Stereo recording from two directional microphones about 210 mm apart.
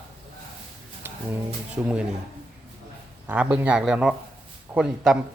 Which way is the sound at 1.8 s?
10° right (ahead or behind).